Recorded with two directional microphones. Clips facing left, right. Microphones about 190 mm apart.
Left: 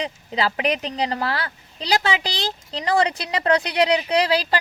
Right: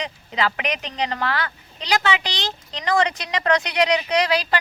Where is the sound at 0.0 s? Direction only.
35° left (ahead or behind).